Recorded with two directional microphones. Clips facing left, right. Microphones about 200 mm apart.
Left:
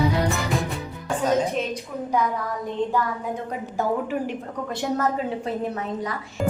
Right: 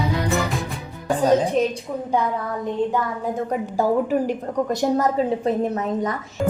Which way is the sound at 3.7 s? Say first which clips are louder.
Right 5 dB; 40° right (ahead or behind).